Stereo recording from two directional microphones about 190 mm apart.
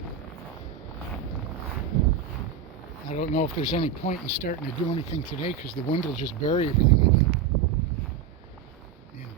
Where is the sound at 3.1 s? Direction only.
40° left (ahead or behind).